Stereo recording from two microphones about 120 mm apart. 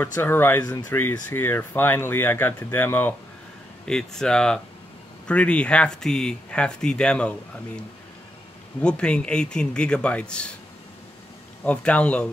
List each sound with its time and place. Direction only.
0.0 s speech: 15° left (ahead or behind)
3.8 s speech: 5° left (ahead or behind)
8.8 s speech: 10° left (ahead or behind)
11.6 s speech: 10° left (ahead or behind)